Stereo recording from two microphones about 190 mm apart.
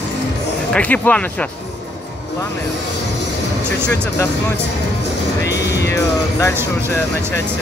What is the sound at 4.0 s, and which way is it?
Speech, 15° left (ahead or behind).